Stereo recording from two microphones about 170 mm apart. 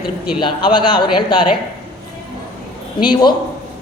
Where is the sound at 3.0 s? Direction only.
25° left (ahead or behind).